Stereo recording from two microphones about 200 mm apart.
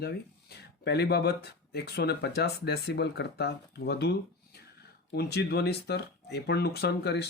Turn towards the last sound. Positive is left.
turn(degrees=55)  # may be behind; listen again after turning